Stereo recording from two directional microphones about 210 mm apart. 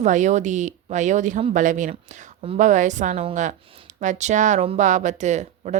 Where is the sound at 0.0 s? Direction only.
35° right (ahead or behind).